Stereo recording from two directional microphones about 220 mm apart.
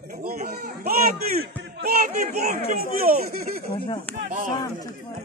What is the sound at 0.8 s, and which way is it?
A man's voice, 45° right (ahead or behind).